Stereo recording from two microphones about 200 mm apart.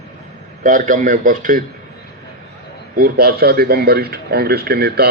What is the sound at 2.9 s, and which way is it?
A man's voice, 50° right (ahead or behind).